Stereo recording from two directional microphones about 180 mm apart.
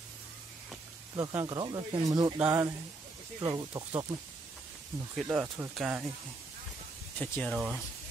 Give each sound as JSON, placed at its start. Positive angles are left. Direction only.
{"t": 1.1, "sound": "speech", "side_deg": -20}
{"t": 5.1, "sound": "speech", "side_deg": -5}
{"t": 7.2, "sound": "speech", "side_deg": 5}